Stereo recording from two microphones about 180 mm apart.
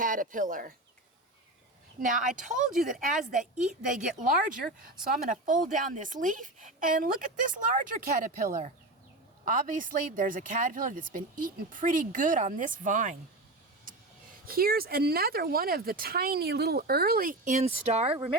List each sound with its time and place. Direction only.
0.0 s a woman's voice: 50° right (ahead or behind)
2.0 s a woman's voice: 45° right (ahead or behind)
14.4 s speech: 55° right (ahead or behind); by 18.3 s 35° right (ahead or behind)